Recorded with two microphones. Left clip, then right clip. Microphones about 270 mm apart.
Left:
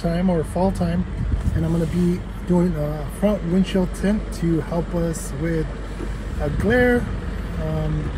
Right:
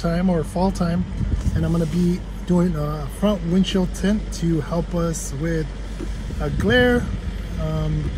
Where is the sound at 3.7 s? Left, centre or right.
Centre.